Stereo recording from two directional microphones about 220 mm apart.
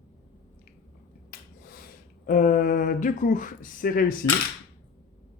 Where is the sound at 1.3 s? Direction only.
40° left (ahead or behind).